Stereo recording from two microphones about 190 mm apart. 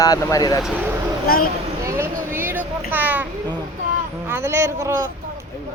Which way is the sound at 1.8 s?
15° right (ahead or behind).